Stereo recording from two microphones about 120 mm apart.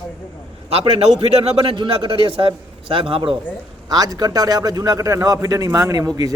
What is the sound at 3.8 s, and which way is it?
A man's voice, 30° right (ahead or behind).